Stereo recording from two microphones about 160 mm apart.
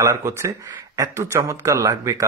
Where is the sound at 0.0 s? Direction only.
20° right (ahead or behind).